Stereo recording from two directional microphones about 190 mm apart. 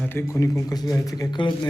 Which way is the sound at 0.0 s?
10° left (ahead or behind).